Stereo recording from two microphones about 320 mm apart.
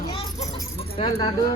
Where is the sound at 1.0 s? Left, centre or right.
Centre.